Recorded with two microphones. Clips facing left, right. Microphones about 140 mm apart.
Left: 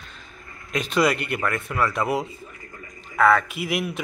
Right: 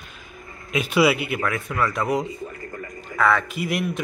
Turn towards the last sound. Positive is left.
turn(degrees=0)  # may be behind; listen again after turning